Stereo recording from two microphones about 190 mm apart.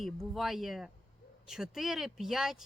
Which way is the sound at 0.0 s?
Centre (ahead or behind).